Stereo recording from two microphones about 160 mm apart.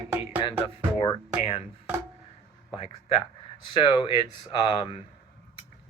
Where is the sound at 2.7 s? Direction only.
35° left (ahead or behind).